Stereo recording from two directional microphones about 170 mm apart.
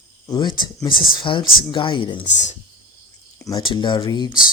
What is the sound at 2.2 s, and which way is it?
Speech, 45° left (ahead or behind).